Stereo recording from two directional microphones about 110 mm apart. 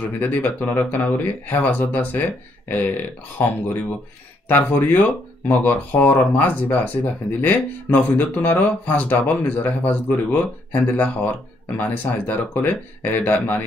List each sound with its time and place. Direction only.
0.2 s speech: 15° left (ahead or behind)